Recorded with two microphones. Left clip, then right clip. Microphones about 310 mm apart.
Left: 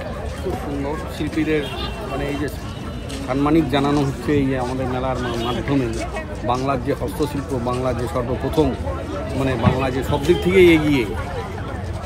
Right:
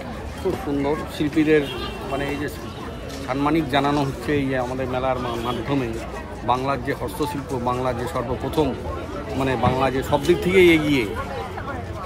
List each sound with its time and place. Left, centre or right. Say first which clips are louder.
0.8 s speech: right 2 dB; right
3.3 s speech: left 3 dB; centre
6.4 s speech: left 1 dB; centre